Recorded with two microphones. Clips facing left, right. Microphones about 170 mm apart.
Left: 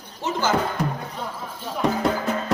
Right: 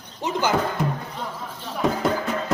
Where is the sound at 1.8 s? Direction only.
Centre (ahead or behind).